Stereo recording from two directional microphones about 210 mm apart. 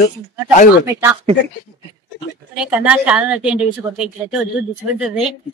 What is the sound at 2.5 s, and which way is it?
Speech, 5° right (ahead or behind).